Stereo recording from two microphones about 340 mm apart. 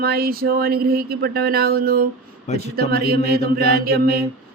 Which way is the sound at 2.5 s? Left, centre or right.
Centre.